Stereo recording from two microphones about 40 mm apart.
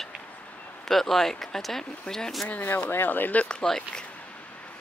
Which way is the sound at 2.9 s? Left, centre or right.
Left.